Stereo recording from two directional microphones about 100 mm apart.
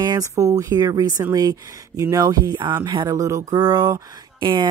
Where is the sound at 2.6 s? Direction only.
50° right (ahead or behind).